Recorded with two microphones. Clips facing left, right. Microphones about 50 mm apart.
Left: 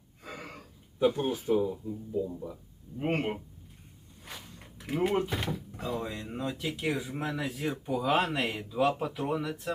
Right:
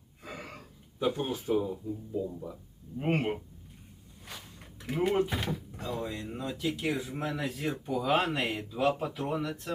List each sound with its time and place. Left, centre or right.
0.2 s gasp: centre
0.9 s speech: centre
4.3 s a sound: centre
5.8 s speech: centre
6.9 s speech: centre